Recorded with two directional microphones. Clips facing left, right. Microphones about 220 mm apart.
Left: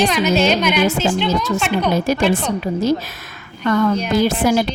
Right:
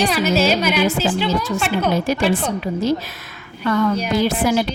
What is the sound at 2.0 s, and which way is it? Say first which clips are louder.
Speech: left 2 dB; 45° left (ahead or behind).